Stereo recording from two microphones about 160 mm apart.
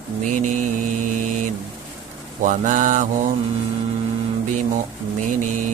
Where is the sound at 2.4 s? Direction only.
55° right (ahead or behind).